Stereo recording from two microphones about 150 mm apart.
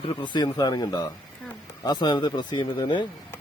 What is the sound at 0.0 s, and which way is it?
Speech, 35° left (ahead or behind).